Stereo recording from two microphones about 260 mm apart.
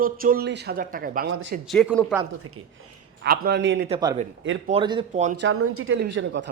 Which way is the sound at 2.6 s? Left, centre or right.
Right.